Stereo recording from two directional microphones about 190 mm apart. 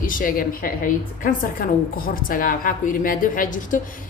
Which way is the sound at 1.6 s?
50° left (ahead or behind).